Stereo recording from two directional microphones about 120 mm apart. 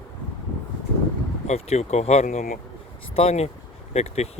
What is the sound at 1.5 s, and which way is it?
Speech, 65° left (ahead or behind).